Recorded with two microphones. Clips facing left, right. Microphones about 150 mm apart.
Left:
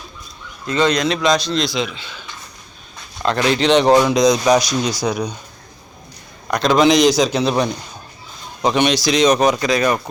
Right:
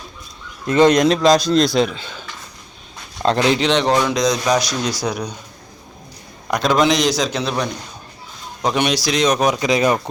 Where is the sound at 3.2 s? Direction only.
25° right (ahead or behind).